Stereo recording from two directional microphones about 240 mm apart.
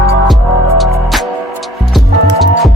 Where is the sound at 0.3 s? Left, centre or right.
Centre.